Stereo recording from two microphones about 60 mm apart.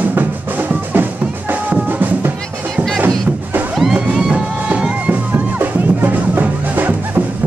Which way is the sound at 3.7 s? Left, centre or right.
Centre.